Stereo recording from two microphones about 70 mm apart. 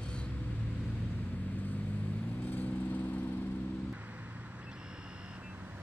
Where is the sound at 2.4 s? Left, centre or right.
Left.